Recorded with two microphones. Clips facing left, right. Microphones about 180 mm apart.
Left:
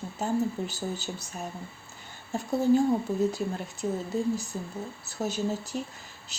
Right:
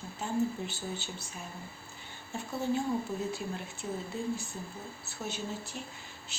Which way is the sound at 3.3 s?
40° left (ahead or behind).